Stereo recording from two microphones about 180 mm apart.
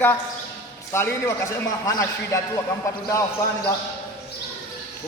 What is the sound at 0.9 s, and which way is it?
Speech, 15° left (ahead or behind).